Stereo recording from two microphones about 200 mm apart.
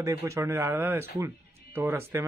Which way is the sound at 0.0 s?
15° right (ahead or behind).